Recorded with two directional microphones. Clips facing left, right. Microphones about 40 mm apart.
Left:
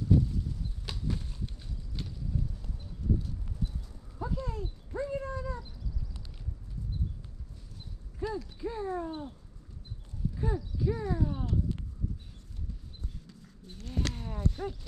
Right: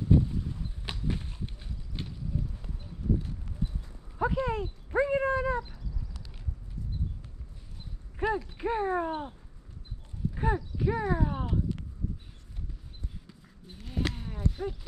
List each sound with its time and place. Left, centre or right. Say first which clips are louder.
0.1 s clip-clop: right 2 dB; right
2.0 s a sound: right 1 dB; right
3.2 s clip-clop: right 2 dB; right
4.2 s dog: right 8 dB; right
8.2 s speech: right 5 dB; right
10.3 s a sound: right 6 dB; right
13.3 s clip-clop: even; centre